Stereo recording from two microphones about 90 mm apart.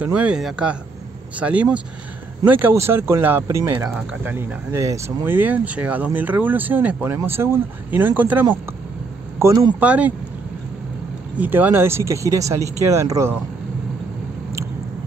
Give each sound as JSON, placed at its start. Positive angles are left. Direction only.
{"t": 0.0, "sound": "speech", "side_deg": -15}
{"t": 3.4, "sound": "speech", "side_deg": -35}
{"t": 3.9, "sound": "speech", "side_deg": -15}
{"t": 4.7, "sound": "speech", "side_deg": -35}
{"t": 5.2, "sound": "speech", "side_deg": -20}
{"t": 9.4, "sound": "speech", "side_deg": -30}
{"t": 9.8, "sound": "speech", "side_deg": -15}
{"t": 11.3, "sound": "speech", "side_deg": -20}